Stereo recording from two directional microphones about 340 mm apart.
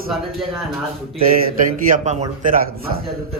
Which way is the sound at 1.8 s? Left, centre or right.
Right.